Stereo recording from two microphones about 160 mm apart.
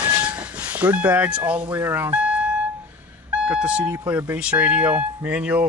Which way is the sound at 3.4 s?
5° right (ahead or behind).